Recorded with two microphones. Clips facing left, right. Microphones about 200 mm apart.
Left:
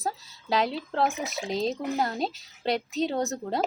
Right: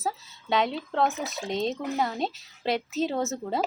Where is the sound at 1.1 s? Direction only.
15° left (ahead or behind).